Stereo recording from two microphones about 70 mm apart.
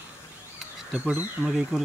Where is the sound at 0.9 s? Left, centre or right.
Right.